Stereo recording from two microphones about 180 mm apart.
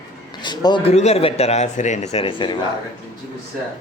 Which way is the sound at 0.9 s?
35° left (ahead or behind).